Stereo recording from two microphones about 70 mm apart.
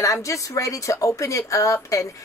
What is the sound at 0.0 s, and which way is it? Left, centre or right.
Speech, left.